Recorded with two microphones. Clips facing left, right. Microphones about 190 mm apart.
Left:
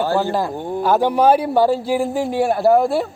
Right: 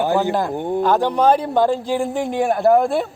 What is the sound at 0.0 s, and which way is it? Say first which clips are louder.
Speech: right 1 dB; 20° right (ahead or behind).